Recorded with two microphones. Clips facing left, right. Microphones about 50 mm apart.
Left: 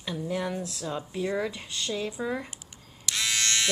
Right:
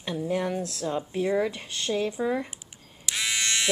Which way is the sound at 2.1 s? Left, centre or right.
Centre.